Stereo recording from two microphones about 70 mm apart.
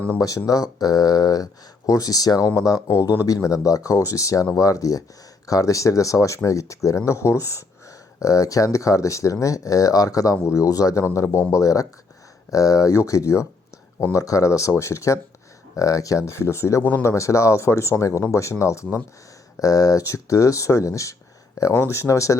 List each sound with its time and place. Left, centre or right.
0.2 s speech: left
2.8 s speech: left
11.0 s a man's voice: left
19.5 s speech: left